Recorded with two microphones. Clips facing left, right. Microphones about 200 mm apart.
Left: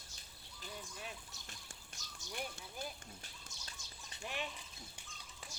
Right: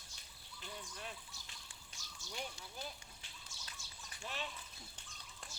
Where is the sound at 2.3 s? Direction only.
55° left (ahead or behind).